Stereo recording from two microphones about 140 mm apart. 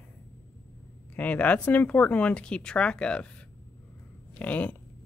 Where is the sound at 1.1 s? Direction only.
10° left (ahead or behind).